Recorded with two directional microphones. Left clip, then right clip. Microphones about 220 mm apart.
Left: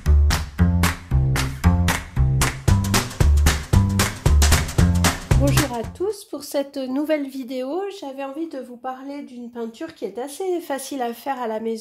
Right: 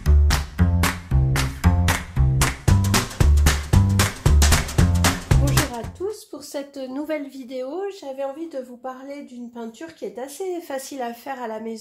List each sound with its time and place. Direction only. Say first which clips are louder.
0.0 s music: even; centre (ahead or behind)
6.0 s speech: left 3 dB; 40° left (ahead or behind)
9.6 s speech: left 4 dB; 35° left (ahead or behind)